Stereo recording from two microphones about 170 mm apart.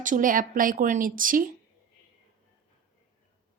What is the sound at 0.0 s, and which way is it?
Speech, 50° right (ahead or behind).